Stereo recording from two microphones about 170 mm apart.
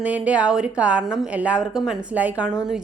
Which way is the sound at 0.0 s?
5° right (ahead or behind).